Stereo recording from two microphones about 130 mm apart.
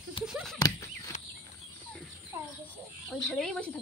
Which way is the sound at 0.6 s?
25° left (ahead or behind).